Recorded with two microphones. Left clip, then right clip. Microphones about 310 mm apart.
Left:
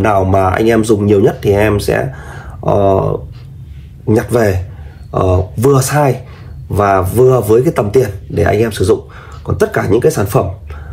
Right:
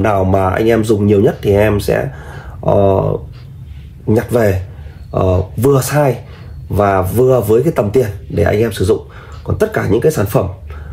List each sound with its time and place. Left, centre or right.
0.0 s speech: left